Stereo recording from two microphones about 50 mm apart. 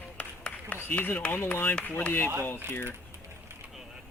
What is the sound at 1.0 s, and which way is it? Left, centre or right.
Speech, left.